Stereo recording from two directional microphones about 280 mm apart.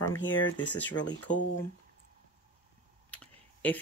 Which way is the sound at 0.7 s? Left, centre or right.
Centre.